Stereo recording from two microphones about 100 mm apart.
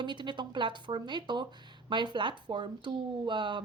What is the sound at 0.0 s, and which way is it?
A woman's voice, 50° right (ahead or behind).